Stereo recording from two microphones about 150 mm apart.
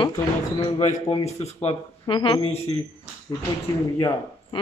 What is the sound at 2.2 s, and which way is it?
Speech, 35° left (ahead or behind).